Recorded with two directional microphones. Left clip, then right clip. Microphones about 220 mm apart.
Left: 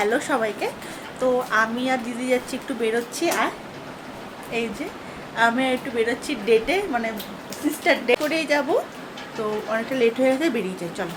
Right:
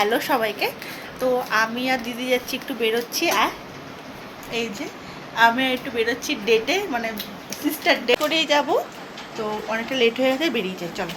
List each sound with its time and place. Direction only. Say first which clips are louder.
0.0 s a woman's voice: right 1 dB; 10° left (ahead or behind)
5.4 s a woman's voice: right 2 dB; 15° left (ahead or behind)